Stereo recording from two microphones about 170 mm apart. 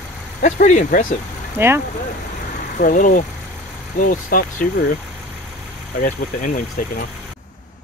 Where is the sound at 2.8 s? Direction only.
55° left (ahead or behind).